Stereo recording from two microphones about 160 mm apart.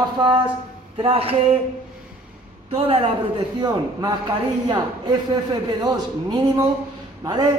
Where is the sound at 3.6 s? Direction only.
25° right (ahead or behind).